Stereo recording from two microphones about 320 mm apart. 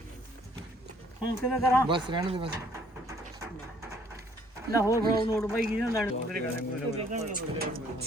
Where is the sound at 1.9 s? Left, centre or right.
Centre.